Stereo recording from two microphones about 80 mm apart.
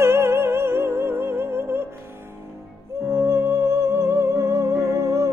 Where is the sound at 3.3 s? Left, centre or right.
Right.